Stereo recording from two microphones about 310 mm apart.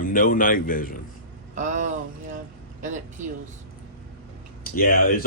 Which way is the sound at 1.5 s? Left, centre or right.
Right.